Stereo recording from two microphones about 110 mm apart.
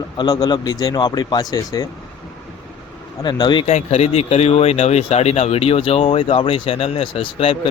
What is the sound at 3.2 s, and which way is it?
Speech, 45° left (ahead or behind).